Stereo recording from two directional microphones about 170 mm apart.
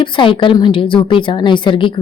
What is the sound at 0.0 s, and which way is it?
A woman's voice, 30° left (ahead or behind).